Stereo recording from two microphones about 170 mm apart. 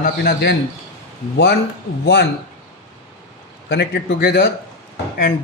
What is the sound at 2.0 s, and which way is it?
Speech, 70° left (ahead or behind).